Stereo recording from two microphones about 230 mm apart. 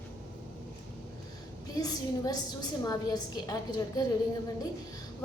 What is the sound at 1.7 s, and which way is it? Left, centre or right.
A woman's voice, centre.